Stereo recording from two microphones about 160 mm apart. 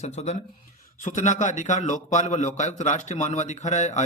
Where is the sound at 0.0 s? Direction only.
45° left (ahead or behind).